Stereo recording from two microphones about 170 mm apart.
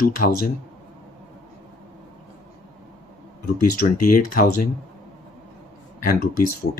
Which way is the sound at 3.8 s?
55° left (ahead or behind).